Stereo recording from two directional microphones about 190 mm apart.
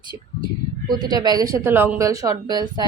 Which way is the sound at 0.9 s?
20° right (ahead or behind).